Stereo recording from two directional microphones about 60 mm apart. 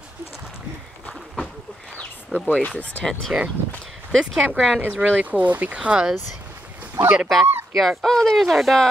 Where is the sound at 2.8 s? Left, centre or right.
Left.